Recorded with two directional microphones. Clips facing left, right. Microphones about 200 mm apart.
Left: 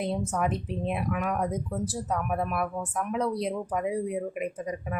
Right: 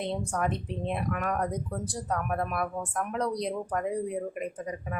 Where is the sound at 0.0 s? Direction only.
5° left (ahead or behind).